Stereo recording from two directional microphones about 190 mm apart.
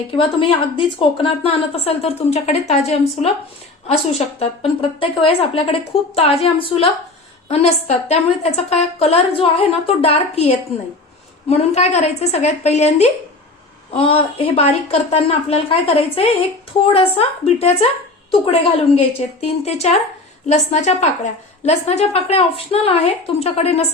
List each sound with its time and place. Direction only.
0.1 s a woman's voice: 25° left (ahead or behind)
4.4 s a woman's voice: 30° left (ahead or behind)